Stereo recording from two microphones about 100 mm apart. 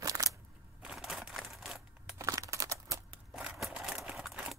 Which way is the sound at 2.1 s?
30° right (ahead or behind).